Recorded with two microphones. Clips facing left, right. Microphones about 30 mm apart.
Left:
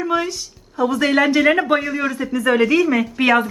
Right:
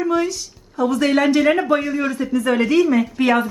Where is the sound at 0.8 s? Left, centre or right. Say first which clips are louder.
Even; centre.